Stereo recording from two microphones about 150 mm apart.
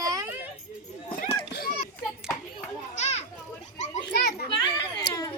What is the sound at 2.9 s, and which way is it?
Children playing, 50° left (ahead or behind).